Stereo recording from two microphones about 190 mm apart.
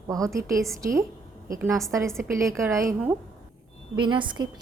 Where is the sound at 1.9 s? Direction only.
15° right (ahead or behind).